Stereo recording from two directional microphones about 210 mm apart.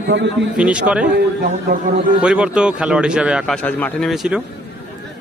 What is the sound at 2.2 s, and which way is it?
A man's voice, 5° right (ahead or behind).